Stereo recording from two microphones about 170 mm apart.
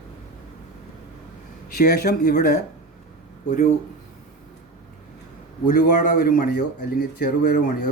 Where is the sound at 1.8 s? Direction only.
65° left (ahead or behind).